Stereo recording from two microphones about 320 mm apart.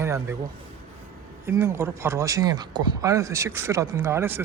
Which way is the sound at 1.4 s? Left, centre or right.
Centre.